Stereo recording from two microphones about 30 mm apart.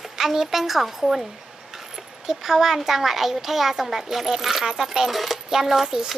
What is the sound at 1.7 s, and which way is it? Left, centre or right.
Speech, centre.